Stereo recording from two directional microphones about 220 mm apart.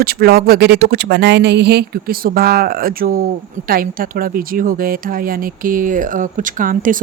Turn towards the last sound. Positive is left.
turn(degrees=-35)  # may be behind; listen again after turning